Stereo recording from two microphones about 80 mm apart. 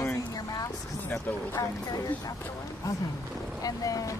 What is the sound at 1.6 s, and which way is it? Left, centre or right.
Speech, left.